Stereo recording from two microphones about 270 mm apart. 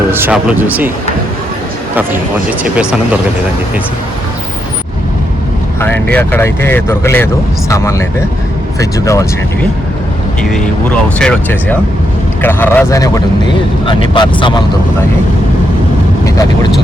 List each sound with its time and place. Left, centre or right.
0.1 s speech: centre
2.7 s speech: centre
5.8 s speech: centre
11.2 s speech: centre